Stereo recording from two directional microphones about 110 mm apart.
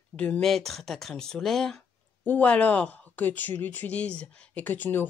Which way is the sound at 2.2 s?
15° left (ahead or behind).